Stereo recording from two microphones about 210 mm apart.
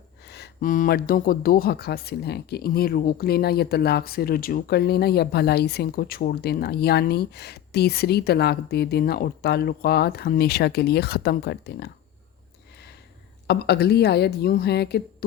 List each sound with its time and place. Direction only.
0.3 s speech: 50° left (ahead or behind)
13.5 s speech: 50° left (ahead or behind)